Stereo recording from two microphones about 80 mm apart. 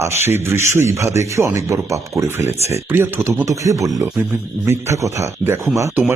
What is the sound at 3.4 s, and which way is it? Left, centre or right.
Speech, right.